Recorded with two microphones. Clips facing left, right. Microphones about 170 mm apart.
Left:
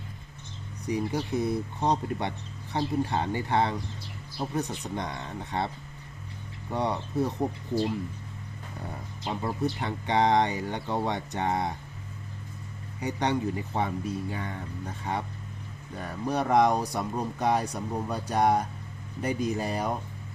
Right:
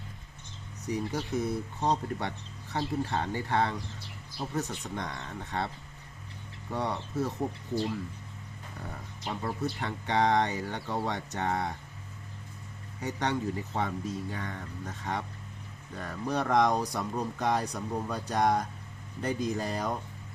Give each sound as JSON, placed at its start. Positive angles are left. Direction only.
{"t": 0.9, "sound": "speech", "side_deg": 10}
{"t": 9.2, "sound": "speech", "side_deg": 25}
{"t": 13.0, "sound": "speech", "side_deg": 15}